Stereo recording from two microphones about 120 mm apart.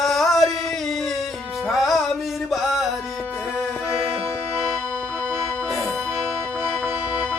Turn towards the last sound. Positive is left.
turn(degrees=-15)  # may be behind; listen again after turning